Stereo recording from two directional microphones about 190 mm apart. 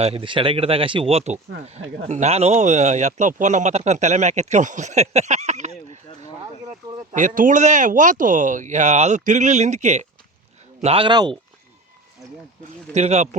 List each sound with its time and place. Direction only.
0.0 s speech: 30° right (ahead or behind)
7.1 s speech: 40° right (ahead or behind); by 11.3 s 25° right (ahead or behind)
12.9 s speech: 35° right (ahead or behind)